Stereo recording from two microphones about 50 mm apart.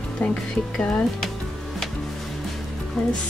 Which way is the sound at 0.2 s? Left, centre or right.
Left.